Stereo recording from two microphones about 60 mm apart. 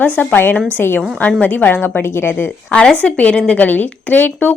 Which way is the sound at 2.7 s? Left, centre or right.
Left.